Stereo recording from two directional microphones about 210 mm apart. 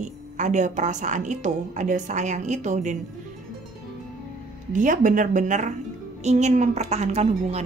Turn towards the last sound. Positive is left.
turn(degrees=-30)  # may be behind; listen again after turning